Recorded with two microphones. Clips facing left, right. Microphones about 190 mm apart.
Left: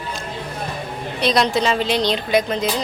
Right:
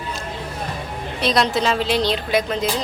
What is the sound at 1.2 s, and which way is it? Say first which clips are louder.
A woman's voice: left 1 dB; centre (ahead or behind).